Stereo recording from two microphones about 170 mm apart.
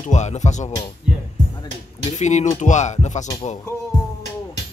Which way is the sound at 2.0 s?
45° left (ahead or behind).